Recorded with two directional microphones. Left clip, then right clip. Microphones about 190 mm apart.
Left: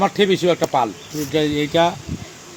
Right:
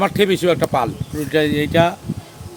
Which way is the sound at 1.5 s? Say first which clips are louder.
Even; 25° right (ahead or behind).